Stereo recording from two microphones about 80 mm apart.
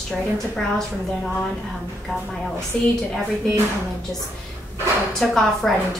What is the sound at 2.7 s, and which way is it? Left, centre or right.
Speech, centre.